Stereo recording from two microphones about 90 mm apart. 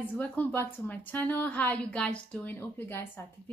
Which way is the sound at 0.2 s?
20° left (ahead or behind).